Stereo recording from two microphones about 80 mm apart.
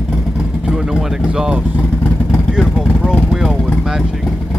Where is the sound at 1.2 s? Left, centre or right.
Centre.